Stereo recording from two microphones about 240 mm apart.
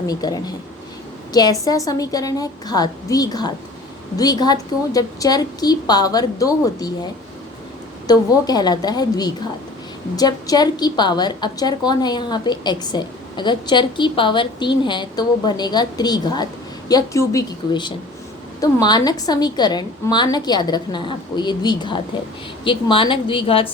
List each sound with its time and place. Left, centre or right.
0.1 s a woman's voice: centre
8.0 s a woman's voice: centre